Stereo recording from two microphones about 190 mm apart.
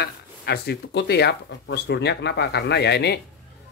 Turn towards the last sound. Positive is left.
turn(degrees=60)  # may be behind; listen again after turning